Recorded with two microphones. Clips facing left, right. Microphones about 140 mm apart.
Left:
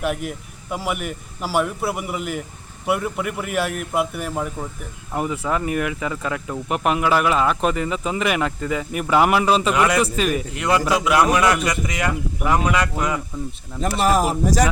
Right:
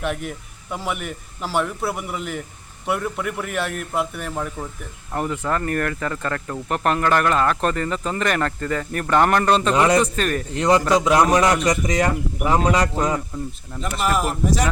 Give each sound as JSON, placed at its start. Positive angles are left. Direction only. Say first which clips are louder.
{"t": 0.0, "sound": "a man's voice", "louder": "left 2 dB", "side_deg": 5}
{"t": 9.7, "sound": "a man's voice", "louder": "right 2 dB", "side_deg": -30}
{"t": 10.0, "sound": "speech", "louder": "left 1 dB", "side_deg": 5}
{"t": 10.5, "sound": "a man's voice", "louder": "right 6 dB", "side_deg": -35}
{"t": 14.0, "sound": "speech", "louder": "left 3 dB", "side_deg": 40}